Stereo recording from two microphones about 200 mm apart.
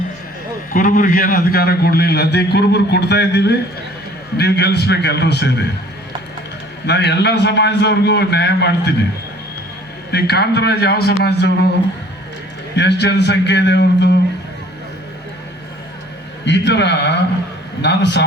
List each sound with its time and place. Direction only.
0.7 s a man's voice: 45° left (ahead or behind)
6.8 s a man's voice: 55° left (ahead or behind)
10.1 s a man's voice: 55° left (ahead or behind)
12.7 s a man's voice: 60° left (ahead or behind)
16.5 s a man's voice: 60° left (ahead or behind)